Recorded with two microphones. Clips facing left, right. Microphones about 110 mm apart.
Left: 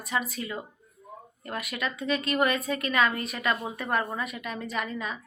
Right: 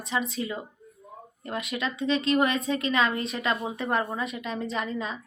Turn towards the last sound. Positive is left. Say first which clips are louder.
# right 2 dB
turn(degrees=-30)  # may be behind; listen again after turning